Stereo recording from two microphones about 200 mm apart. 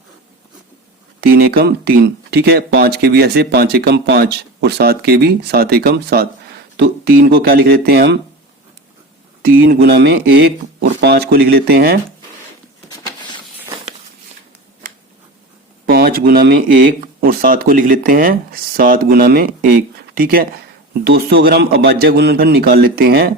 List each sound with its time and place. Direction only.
1.3 s speech: 50° right (ahead or behind)
9.4 s speech: 50° right (ahead or behind)
15.9 s speech: 45° right (ahead or behind)